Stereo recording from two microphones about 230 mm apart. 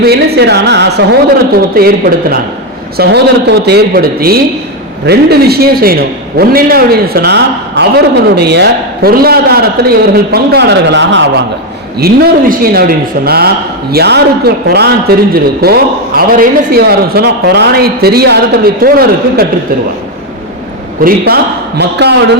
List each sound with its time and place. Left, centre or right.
0.0 s a woman's voice: right
3.0 s a man's voice: right
21.0 s a man's voice: right